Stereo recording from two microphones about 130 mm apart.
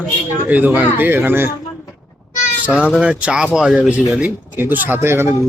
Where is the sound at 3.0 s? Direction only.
10° right (ahead or behind).